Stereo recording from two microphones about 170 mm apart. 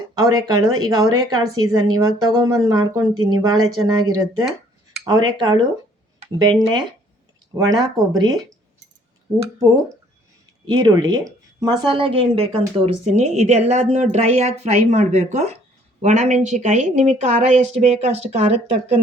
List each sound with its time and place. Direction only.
0.1 s speech: 20° right (ahead or behind)
10.7 s speech: 25° right (ahead or behind)